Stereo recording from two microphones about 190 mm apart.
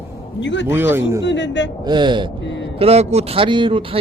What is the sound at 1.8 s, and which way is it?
Speech, 25° right (ahead or behind).